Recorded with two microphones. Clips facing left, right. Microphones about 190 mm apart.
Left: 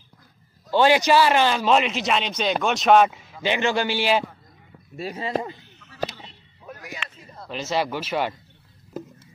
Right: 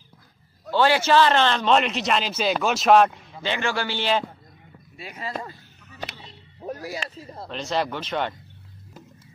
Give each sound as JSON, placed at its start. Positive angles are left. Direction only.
{"t": 0.7, "sound": "a man's voice", "side_deg": 15}
{"t": 3.4, "sound": "a man's voice", "side_deg": 20}
{"t": 4.9, "sound": "speech", "side_deg": 40}
{"t": 5.2, "sound": "speech", "side_deg": 20}
{"t": 6.6, "sound": "speech", "side_deg": -35}
{"t": 7.4, "sound": "a man's voice", "side_deg": 5}